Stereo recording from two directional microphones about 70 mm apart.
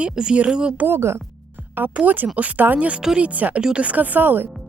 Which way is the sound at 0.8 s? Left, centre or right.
Right.